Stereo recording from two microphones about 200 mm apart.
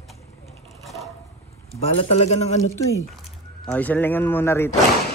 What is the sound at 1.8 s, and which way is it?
Speech, 30° left (ahead or behind).